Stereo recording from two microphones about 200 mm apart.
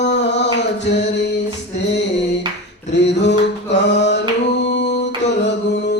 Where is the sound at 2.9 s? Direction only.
60° left (ahead or behind).